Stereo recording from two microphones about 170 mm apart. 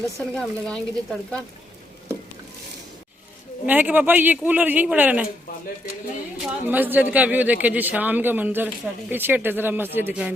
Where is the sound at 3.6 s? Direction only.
10° right (ahead or behind).